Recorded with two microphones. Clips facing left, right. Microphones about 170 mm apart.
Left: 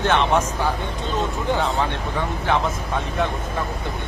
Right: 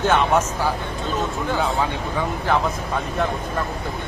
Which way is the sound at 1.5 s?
Centre (ahead or behind).